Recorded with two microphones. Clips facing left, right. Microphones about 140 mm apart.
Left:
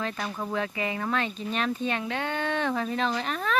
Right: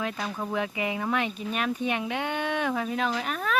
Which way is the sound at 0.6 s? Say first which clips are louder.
Right 1 dB; 15° right (ahead or behind).